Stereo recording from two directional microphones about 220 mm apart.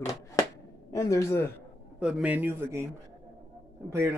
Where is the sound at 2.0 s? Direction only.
5° right (ahead or behind).